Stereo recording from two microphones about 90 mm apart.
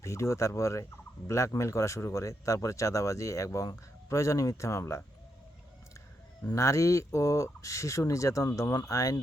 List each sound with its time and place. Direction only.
0.0 s speech: 35° left (ahead or behind)
6.4 s speech: 40° left (ahead or behind)